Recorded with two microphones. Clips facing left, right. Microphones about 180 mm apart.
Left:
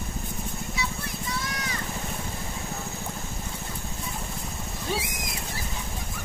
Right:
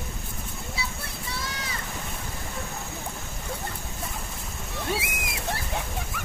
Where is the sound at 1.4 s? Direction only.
30° right (ahead or behind).